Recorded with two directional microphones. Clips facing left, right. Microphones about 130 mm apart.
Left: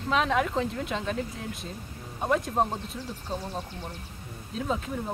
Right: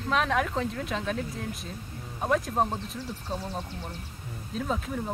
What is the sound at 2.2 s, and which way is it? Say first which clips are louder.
Speech: even; centre (ahead or behind).